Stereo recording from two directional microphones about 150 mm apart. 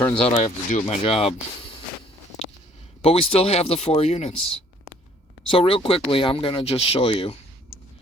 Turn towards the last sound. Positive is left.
turn(degrees=40)  # may be behind; listen again after turning